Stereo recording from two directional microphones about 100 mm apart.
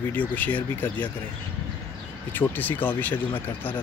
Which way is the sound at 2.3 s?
20° left (ahead or behind).